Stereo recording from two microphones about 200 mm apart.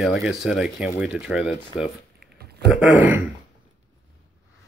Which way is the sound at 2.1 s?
50° right (ahead or behind).